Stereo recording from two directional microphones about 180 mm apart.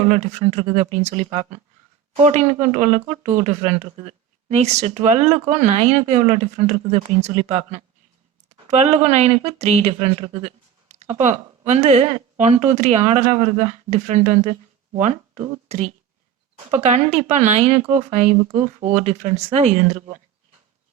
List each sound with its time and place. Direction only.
0.1 s speech: 40° right (ahead or behind)